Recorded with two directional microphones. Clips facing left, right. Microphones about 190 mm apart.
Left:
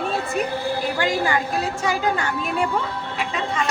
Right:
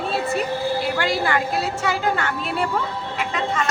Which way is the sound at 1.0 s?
15° left (ahead or behind).